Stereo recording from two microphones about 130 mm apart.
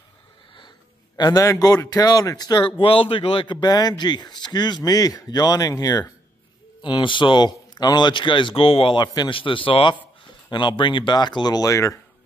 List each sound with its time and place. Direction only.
1.1 s a man's voice: 30° left (ahead or behind)